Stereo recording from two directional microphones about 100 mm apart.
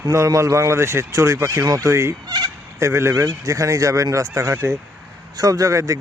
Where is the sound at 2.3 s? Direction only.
40° right (ahead or behind).